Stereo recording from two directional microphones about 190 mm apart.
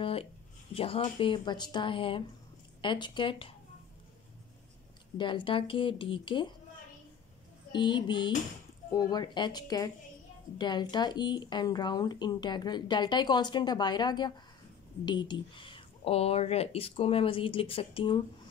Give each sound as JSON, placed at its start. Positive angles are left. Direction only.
{"t": 0.0, "sound": "a sound", "side_deg": 30}
{"t": 0.7, "sound": "speech", "side_deg": 30}
{"t": 5.1, "sound": "speech", "side_deg": 25}
{"t": 7.7, "sound": "speech", "side_deg": 25}